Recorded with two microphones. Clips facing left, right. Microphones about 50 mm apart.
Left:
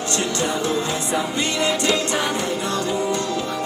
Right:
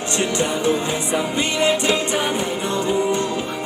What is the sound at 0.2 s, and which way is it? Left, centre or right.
Music, right.